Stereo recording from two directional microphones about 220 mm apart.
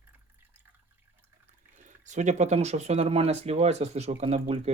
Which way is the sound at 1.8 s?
35° right (ahead or behind).